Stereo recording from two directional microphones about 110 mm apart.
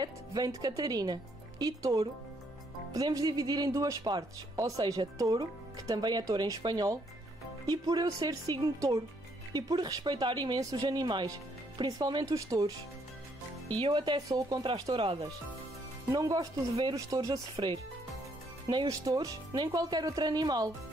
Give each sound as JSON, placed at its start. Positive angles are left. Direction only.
{"t": 0.0, "sound": "speech", "side_deg": -35}
{"t": 13.7, "sound": "speech", "side_deg": -50}
{"t": 16.1, "sound": "speech", "side_deg": -30}
{"t": 17.6, "sound": "speech", "side_deg": -45}
{"t": 18.9, "sound": "speech", "side_deg": -30}